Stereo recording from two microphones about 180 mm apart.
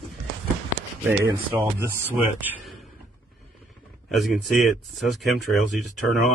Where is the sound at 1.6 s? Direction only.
10° right (ahead or behind).